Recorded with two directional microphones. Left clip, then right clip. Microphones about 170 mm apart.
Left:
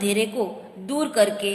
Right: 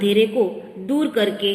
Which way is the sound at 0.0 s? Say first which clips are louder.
Right 6 dB; 55° left (ahead or behind).